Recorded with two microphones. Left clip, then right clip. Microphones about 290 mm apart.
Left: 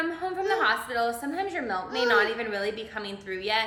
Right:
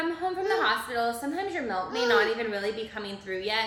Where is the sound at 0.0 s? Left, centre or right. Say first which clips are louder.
Even; centre.